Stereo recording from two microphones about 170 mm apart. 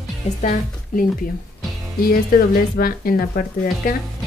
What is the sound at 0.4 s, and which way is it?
Speech, 55° left (ahead or behind).